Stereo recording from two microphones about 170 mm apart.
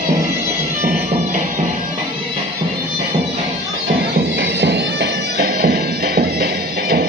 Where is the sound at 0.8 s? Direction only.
50° right (ahead or behind).